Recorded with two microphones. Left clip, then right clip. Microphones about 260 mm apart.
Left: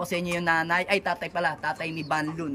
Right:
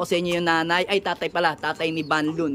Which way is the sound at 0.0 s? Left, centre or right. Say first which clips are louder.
Right 5 dB; centre.